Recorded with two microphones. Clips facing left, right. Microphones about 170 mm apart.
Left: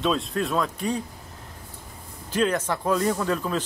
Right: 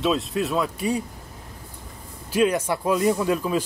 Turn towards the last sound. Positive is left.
turn(degrees=-10)  # may be behind; listen again after turning